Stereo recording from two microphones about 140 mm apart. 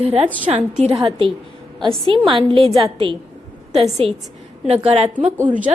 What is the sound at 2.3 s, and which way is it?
A woman's voice, 35° right (ahead or behind).